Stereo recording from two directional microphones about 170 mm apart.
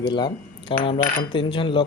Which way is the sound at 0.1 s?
25° left (ahead or behind).